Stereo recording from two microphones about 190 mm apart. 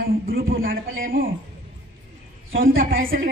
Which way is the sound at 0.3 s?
50° right (ahead or behind).